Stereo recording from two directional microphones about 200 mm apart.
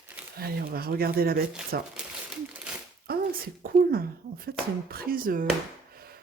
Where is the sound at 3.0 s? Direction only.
50° right (ahead or behind).